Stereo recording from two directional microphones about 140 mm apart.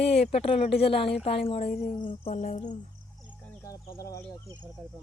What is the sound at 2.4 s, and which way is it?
Speech, 60° left (ahead or behind).